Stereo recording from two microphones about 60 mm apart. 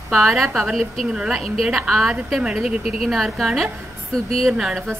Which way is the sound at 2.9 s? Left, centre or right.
Centre.